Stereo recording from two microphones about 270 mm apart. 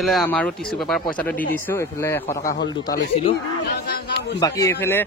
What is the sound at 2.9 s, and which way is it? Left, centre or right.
Speech, left.